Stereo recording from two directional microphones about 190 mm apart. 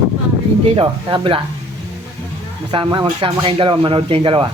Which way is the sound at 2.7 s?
25° right (ahead or behind).